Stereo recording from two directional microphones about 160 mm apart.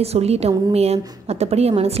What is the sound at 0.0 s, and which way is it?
A woman's voice, 40° right (ahead or behind).